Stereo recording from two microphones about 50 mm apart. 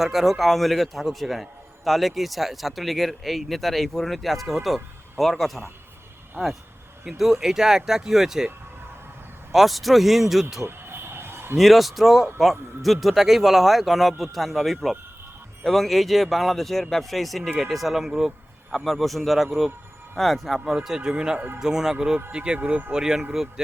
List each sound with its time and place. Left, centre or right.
0.0 s a man's voice: centre
7.0 s speech: centre
9.5 s a man's voice: centre
10.7 s a sound: right
11.5 s a man's voice: centre
20.8 s speech: centre